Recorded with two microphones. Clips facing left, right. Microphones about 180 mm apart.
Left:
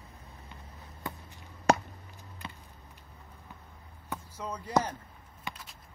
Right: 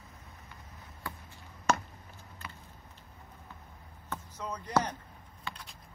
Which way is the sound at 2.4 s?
15° left (ahead or behind).